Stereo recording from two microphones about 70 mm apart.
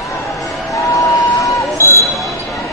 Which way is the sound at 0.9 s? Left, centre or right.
Left.